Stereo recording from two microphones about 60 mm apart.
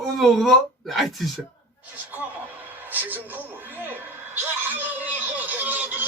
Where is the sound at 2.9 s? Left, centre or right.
Right.